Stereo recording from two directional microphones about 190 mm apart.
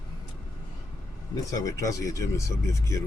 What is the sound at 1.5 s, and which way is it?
Speech, 15° left (ahead or behind).